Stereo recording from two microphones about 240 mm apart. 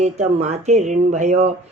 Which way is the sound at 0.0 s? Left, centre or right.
Right.